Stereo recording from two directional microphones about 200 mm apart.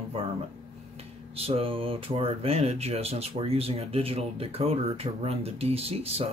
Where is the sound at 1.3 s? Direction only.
30° right (ahead or behind).